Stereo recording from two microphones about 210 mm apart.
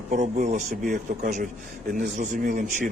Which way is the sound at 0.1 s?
40° right (ahead or behind).